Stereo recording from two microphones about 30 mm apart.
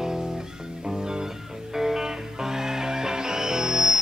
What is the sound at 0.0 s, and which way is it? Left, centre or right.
Music, centre.